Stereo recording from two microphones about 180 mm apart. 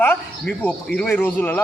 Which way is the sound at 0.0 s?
10° left (ahead or behind).